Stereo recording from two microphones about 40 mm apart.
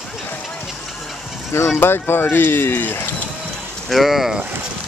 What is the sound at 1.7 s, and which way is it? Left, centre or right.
Speech, left.